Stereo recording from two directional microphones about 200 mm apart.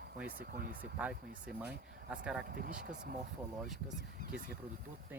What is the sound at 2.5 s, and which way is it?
Speech, 45° right (ahead or behind).